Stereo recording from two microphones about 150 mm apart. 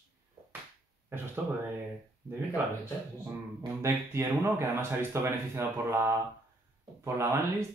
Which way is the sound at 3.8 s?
20° right (ahead or behind).